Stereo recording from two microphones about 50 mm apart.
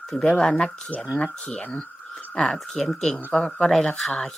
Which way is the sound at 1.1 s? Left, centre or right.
Left.